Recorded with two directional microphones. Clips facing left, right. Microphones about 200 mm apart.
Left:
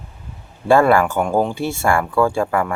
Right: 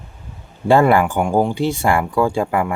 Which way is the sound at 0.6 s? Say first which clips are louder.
Even; 20° right (ahead or behind).